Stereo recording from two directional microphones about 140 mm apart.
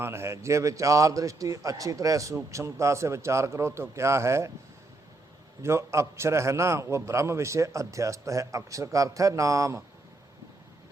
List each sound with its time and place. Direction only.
0.0 s a man's voice: 15° right (ahead or behind)
5.6 s a man's voice: 20° right (ahead or behind)